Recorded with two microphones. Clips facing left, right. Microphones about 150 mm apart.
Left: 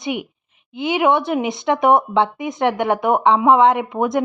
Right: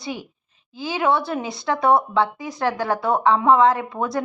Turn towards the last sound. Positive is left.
turn(degrees=20)  # may be behind; listen again after turning